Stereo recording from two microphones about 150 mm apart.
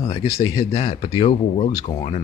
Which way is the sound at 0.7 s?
35° left (ahead or behind).